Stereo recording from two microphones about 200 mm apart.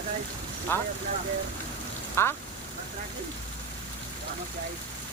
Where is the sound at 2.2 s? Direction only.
10° left (ahead or behind).